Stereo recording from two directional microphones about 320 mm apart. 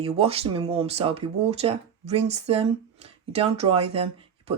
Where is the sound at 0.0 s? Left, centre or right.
Centre.